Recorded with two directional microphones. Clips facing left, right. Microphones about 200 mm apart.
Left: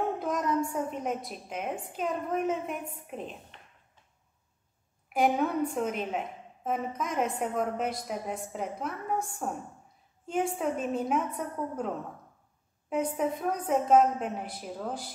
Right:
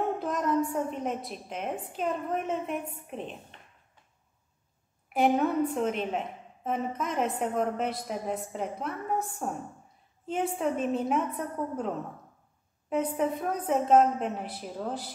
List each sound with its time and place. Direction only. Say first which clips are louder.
0.2 s a woman's voice: right 1 dB; centre (ahead or behind)
5.1 s a woman's voice: right 2 dB; centre (ahead or behind)
12.9 s a woman's voice: right 1 dB; centre (ahead or behind)